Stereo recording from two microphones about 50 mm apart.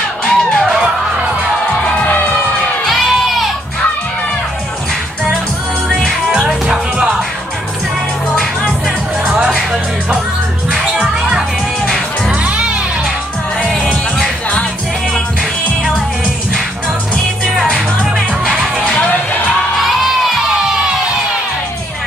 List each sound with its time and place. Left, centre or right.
0.2 s music: centre
2.8 s crowd: centre
5.9 s music: centre
6.7 s music: centre
9.2 s music: centre
10.7 s music: centre
12.4 s music: right
17.7 s music: centre